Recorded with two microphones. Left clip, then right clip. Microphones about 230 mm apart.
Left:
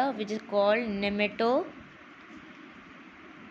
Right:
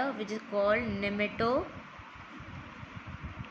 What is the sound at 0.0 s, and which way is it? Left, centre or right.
A woman's voice, centre.